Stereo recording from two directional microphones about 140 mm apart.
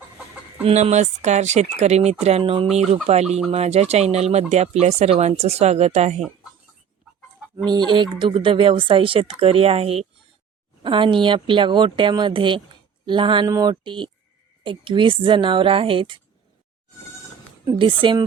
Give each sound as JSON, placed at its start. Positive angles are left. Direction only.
{"t": 0.6, "sound": "speech", "side_deg": -50}
{"t": 2.7, "sound": "speech", "side_deg": -50}
{"t": 7.5, "sound": "speech", "side_deg": -30}
{"t": 17.7, "sound": "speech", "side_deg": -35}